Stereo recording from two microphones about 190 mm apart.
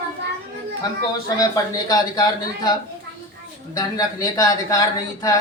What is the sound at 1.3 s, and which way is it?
Speech, 20° left (ahead or behind).